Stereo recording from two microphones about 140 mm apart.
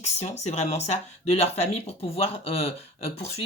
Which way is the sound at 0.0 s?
50° left (ahead or behind).